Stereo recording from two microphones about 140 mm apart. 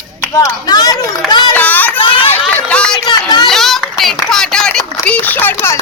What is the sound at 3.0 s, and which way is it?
Speech, 30° left (ahead or behind).